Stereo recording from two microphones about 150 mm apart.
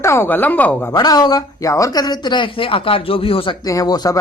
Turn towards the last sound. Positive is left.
turn(degrees=25)  # may be behind; listen again after turning